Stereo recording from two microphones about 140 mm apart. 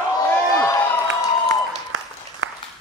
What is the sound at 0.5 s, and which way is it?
Crowd, 20° left (ahead or behind).